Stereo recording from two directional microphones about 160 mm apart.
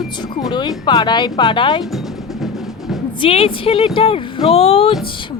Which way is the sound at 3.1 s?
35° left (ahead or behind).